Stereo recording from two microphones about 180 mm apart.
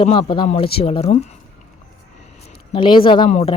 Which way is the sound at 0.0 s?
30° left (ahead or behind).